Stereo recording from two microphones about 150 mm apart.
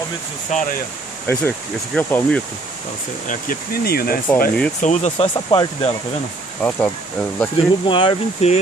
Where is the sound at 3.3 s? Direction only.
80° left.